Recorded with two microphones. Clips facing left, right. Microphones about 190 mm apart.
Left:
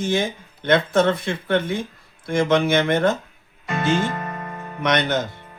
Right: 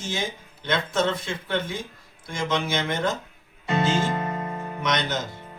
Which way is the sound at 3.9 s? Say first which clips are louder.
Left 2 dB; 10° right (ahead or behind).